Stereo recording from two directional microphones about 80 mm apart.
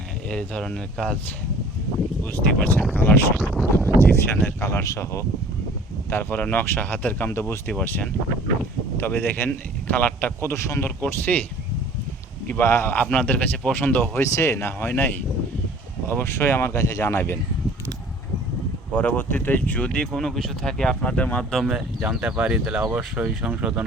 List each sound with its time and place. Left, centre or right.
0.3 s speech: centre
2.3 s speech: left
3.3 s speech: centre
3.8 s speech: left
6.1 s speech: left
9.0 s speech: left
10.5 s speech: left
11.0 s speech: left
12.5 s speech: left
18.9 s speech: left
21.7 s speech: centre